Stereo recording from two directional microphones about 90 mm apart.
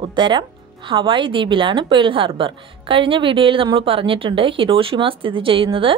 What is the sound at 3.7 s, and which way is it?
Speech, 90° right.